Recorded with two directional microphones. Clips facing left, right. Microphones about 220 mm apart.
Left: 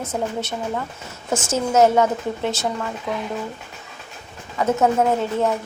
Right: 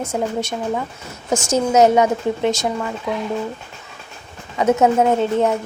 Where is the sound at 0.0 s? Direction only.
10° right (ahead or behind).